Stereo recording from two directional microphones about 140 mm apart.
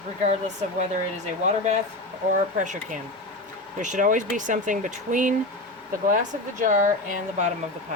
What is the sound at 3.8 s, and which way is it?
Speech, 65° right (ahead or behind).